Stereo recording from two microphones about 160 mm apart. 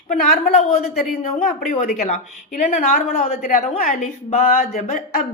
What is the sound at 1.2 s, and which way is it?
A woman's voice, 55° left (ahead or behind).